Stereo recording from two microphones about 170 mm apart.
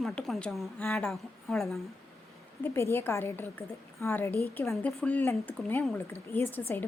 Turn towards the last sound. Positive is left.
turn(degrees=10)  # may be behind; listen again after turning